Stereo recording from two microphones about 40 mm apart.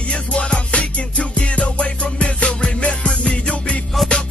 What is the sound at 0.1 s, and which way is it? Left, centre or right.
Music, left.